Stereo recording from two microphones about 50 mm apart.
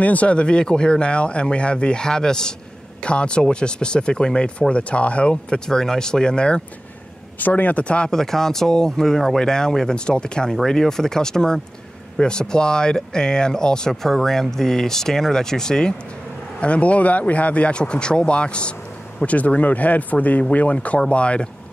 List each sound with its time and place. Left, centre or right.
0.0 s speech: left
7.3 s speech: left
8.1 s speech: centre
16.5 s speech: left